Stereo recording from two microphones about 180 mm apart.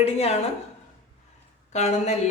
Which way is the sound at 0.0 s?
35° left (ahead or behind).